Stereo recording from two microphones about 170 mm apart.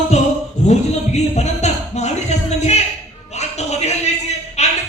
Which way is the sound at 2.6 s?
40° left (ahead or behind).